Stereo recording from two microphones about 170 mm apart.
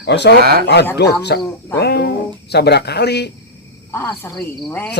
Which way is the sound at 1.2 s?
75° left (ahead or behind).